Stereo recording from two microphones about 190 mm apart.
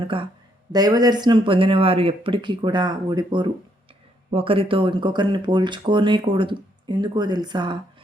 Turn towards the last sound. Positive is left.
turn(degrees=-25)  # may be behind; listen again after turning